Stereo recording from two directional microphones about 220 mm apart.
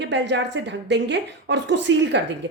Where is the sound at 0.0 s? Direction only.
55° right (ahead or behind).